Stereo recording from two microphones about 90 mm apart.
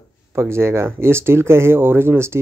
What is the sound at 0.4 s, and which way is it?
Speech, 30° right (ahead or behind).